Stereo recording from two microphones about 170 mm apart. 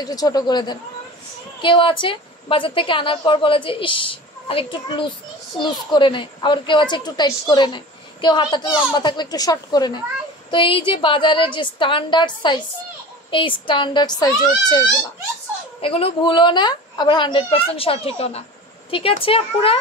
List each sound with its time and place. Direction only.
0.0 s a woman's voice: 20° left (ahead or behind)
15.8 s a woman's voice: 35° left (ahead or behind)